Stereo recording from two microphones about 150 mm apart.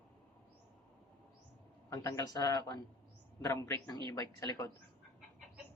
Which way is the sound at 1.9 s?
25° left (ahead or behind).